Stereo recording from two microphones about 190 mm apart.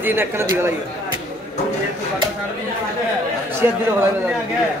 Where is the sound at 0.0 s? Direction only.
10° right (ahead or behind).